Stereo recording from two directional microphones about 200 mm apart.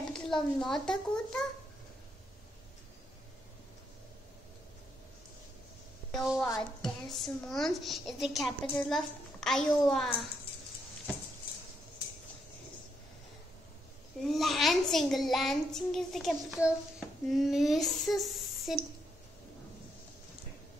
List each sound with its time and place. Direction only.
0.1 s a child's voice: 5° left (ahead or behind)
6.1 s a sound: 5° right (ahead or behind)
6.8 s a woman's voice: centre (ahead or behind)
14.2 s a woman's voice: centre (ahead or behind)